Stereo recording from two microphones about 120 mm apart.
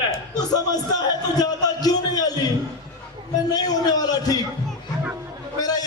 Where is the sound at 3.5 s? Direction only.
35° left (ahead or behind).